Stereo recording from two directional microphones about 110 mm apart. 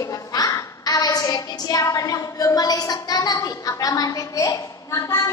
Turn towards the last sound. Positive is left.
turn(degrees=25)  # may be behind; listen again after turning